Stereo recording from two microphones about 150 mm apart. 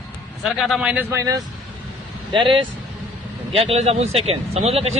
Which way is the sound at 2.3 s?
35° right (ahead or behind).